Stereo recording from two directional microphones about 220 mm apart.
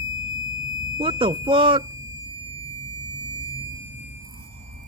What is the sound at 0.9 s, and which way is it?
Speech, 20° right (ahead or behind).